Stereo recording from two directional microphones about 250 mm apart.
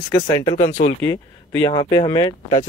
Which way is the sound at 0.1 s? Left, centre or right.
Centre.